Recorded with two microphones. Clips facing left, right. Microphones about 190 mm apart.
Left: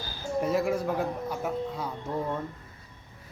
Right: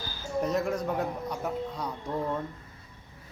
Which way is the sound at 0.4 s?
5° left (ahead or behind).